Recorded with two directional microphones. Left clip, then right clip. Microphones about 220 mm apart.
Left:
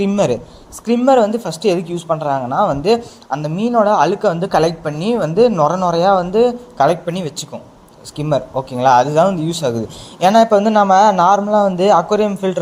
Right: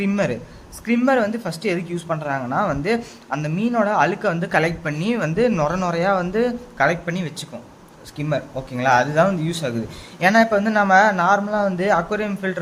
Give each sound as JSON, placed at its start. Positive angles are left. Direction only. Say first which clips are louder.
{"t": 0.0, "sound": "speech", "louder": "left 7 dB", "side_deg": 15}